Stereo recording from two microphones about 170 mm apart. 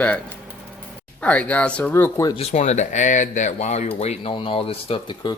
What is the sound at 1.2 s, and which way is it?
Speech, 10° left (ahead or behind).